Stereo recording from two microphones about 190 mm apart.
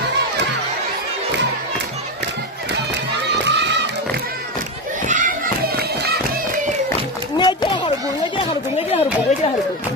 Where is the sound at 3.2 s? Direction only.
65° right (ahead or behind).